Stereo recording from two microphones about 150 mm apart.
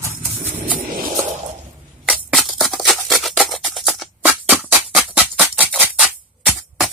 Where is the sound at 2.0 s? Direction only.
Centre (ahead or behind).